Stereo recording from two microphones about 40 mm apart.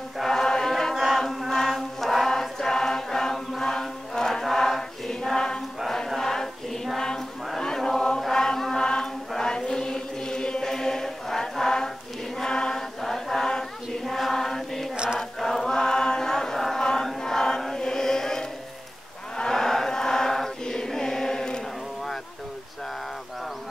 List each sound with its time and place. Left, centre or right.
0.2 s chant: centre
1.7 s music: centre
6.0 s choir: centre
7.6 s chant: centre
12.4 s choir: centre
13.0 s chant: centre
14.0 s chant: centre